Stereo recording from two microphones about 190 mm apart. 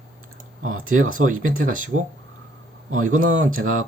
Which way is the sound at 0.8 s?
90° right.